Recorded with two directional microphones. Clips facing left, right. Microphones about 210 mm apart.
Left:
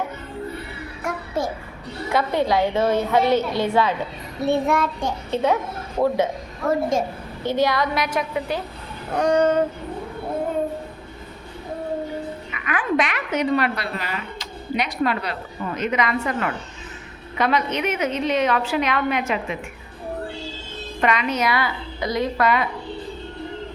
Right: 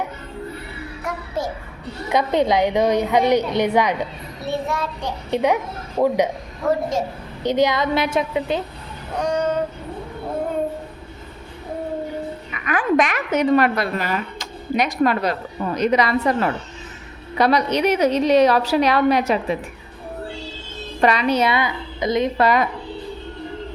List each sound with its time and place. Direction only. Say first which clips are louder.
2.0 s a woman's voice: right 3 dB; 20° right (ahead or behind)
4.4 s child singing: left 4 dB; 55° left (ahead or behind)
5.3 s a woman's voice: right 2 dB; 15° right (ahead or behind)
7.4 s a woman's voice: right 2 dB; 20° right (ahead or behind)
9.1 s child singing: left 3 dB; 55° left (ahead or behind)
12.5 s a woman's voice: right 4 dB; 40° right (ahead or behind)
21.0 s a woman's voice: right 4 dB; 35° right (ahead or behind)